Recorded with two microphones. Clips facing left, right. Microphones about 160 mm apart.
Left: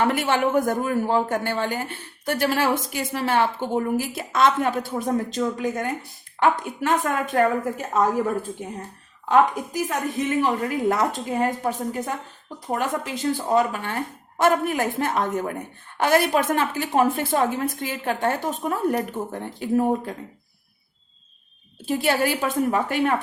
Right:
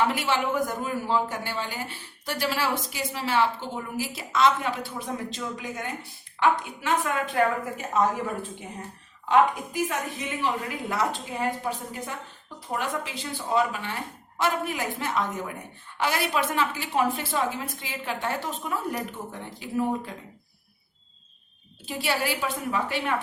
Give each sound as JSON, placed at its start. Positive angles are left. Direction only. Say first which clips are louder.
{"t": 0.0, "sound": "a man's voice", "louder": "left 4 dB", "side_deg": 50}
{"t": 9.3, "sound": "a man's voice", "louder": "left 2 dB", "side_deg": 45}
{"t": 21.8, "sound": "a man's voice", "louder": "left 6 dB", "side_deg": 50}